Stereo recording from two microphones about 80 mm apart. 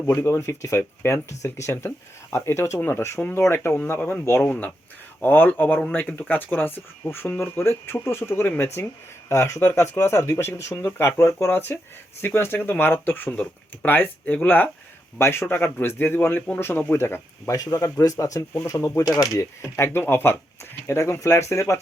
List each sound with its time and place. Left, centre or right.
0.0 s speech: left
17.5 s a man's voice: left
18.9 s speech: left